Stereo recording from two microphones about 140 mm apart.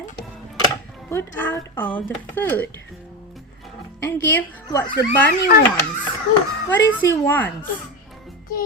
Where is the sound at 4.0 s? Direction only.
15° left (ahead or behind).